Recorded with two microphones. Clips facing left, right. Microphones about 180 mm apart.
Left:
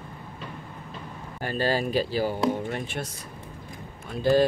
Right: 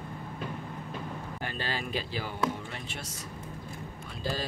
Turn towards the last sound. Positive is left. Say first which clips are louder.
# left 13 dB
turn(degrees=60)  # may be behind; listen again after turning